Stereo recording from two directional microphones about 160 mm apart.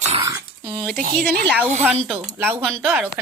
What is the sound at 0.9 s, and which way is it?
Speech, 60° right (ahead or behind).